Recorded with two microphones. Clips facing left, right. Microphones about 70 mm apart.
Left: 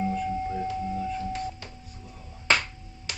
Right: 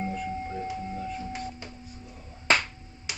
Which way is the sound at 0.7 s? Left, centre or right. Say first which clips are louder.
Left 4 dB; centre.